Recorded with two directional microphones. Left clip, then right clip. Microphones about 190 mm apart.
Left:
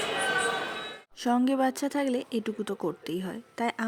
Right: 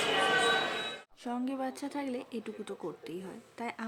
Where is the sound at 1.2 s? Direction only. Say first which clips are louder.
Left 11 dB; 40° left (ahead or behind).